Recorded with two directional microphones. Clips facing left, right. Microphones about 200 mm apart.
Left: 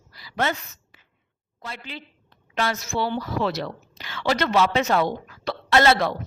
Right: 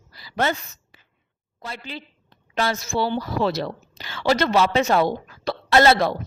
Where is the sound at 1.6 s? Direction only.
35° right (ahead or behind).